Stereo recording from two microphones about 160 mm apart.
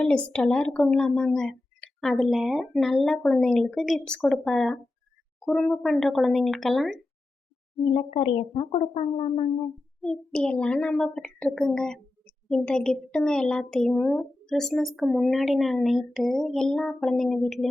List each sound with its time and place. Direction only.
0.0 s a child's voice: 5° left (ahead or behind)
7.9 s speech: 35° left (ahead or behind)
10.0 s a child's voice: 5° left (ahead or behind)